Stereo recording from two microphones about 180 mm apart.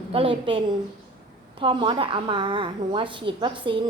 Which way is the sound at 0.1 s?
30° right (ahead or behind).